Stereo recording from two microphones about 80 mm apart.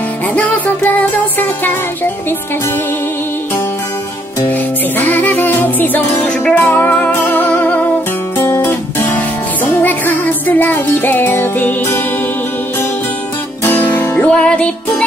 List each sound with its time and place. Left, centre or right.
4.5 s music: left
13.7 s music: left